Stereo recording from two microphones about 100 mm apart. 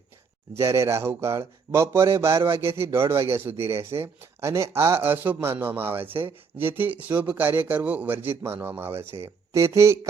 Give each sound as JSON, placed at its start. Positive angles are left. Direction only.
{"t": 0.5, "sound": "speech", "side_deg": -30}